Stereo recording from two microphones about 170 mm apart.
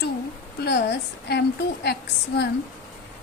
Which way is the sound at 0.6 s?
75° left (ahead or behind).